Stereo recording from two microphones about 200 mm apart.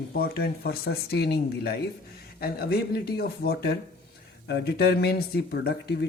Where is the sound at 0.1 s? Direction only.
50° left (ahead or behind).